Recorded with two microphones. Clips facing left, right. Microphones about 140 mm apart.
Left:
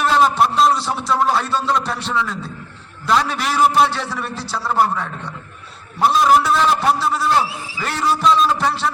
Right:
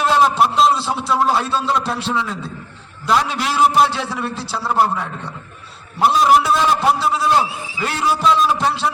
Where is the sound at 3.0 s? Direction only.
Centre (ahead or behind).